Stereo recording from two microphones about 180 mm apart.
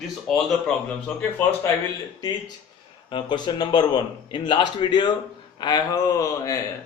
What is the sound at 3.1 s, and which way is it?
A man's voice, 25° left (ahead or behind).